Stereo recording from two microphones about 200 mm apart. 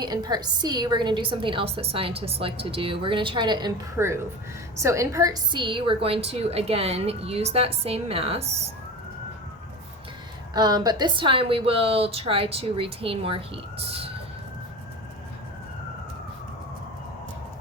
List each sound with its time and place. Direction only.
0.0 s a woman's voice: 20° right (ahead or behind)
10.5 s a woman's voice: 20° right (ahead or behind)